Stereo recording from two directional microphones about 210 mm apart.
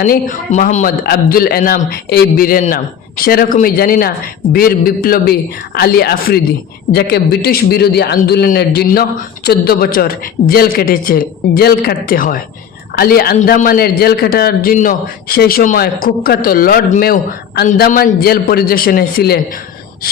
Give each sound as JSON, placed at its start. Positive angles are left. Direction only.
{"t": 0.0, "sound": "a man's voice", "side_deg": 40}